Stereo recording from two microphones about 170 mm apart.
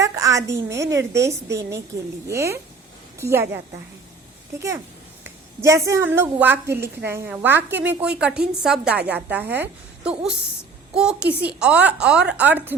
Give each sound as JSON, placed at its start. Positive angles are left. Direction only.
{"t": 0.0, "sound": "a sound", "side_deg": -20}
{"t": 0.7, "sound": "a woman's voice", "side_deg": -15}
{"t": 5.2, "sound": "a woman's voice", "side_deg": -15}